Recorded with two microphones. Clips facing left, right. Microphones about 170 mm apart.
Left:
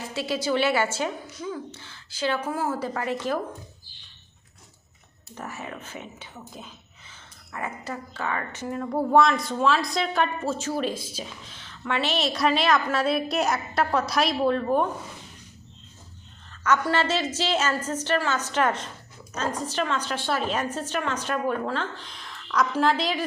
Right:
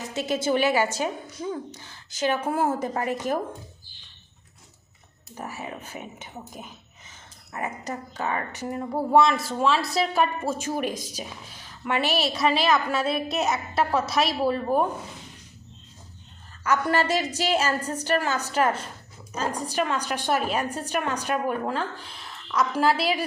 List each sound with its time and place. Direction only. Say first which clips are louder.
0.0 s speech: right 2 dB; 20° right (ahead or behind)
5.3 s speech: right 1 dB; 10° right (ahead or behind)
7.5 s speech: right 1 dB; 20° right (ahead or behind)
9.0 s a woman's voice: even; centre (ahead or behind)
16.6 s speech: even; 10° right (ahead or behind)
17.6 s a woman's voice: even; 35° right (ahead or behind)
17.9 s speech: right 1 dB; 10° right (ahead or behind)
18.2 s a woman's voice: even; 35° right (ahead or behind)
18.5 s speech: right 2 dB; 5° right (ahead or behind)